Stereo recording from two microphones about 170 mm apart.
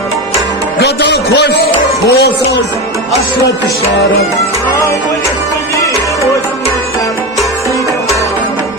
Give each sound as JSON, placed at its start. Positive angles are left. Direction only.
{"t": 0.8, "sound": "a man's voice", "side_deg": 85}